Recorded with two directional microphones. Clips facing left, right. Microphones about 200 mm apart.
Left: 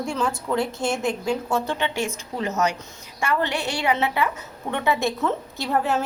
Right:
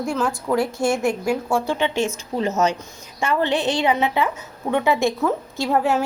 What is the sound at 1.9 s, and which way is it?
Speech, 15° left (ahead or behind).